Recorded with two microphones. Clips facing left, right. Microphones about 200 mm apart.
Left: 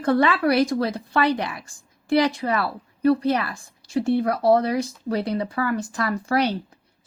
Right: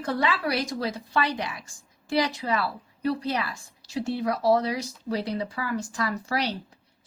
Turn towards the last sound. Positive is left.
turn(degrees=55)  # may be behind; listen again after turning